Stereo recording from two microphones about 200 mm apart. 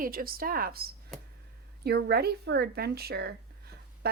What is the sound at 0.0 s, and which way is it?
Speech, 45° right (ahead or behind).